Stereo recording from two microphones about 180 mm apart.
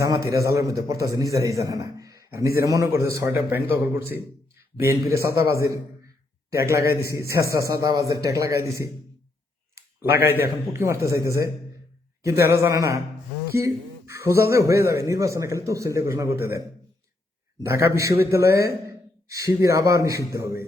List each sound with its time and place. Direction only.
0.0 s a man's voice: 20° right (ahead or behind)
9.7 s a sound: 10° right (ahead or behind)
10.8 s speech: 15° right (ahead or behind)
18.9 s sigh: 15° right (ahead or behind)
19.6 s speech: 15° right (ahead or behind)